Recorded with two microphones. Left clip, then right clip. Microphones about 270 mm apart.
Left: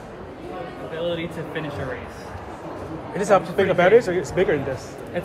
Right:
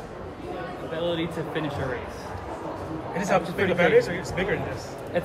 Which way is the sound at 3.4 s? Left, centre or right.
Right.